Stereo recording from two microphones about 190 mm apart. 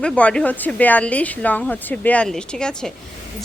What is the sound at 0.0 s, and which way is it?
A woman's voice, 5° left (ahead or behind).